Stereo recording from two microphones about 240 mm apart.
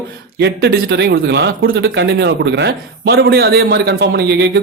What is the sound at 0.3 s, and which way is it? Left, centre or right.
Speech, right.